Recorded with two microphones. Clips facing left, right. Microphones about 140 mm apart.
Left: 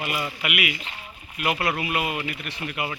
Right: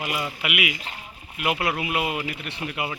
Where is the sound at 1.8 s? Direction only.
20° right (ahead or behind).